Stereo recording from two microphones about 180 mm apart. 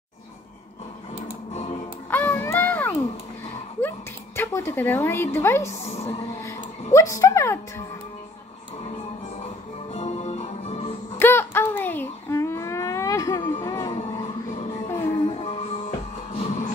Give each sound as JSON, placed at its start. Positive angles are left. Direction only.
{"t": 1.5, "sound": "music", "side_deg": 35}
{"t": 2.0, "sound": "a sound", "side_deg": 10}
{"t": 4.4, "sound": "a woman's voice", "side_deg": 15}
{"t": 5.7, "sound": "a woman's voice", "side_deg": 35}
{"t": 6.9, "sound": "a woman's voice", "side_deg": 15}
{"t": 9.9, "sound": "music", "side_deg": 40}
{"t": 11.1, "sound": "a sound", "side_deg": 10}
{"t": 14.9, "sound": "music", "side_deg": 15}
{"t": 16.3, "sound": "music", "side_deg": 40}